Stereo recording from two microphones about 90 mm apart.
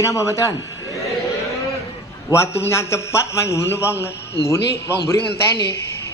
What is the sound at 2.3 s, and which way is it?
A man's voice, 30° left (ahead or behind).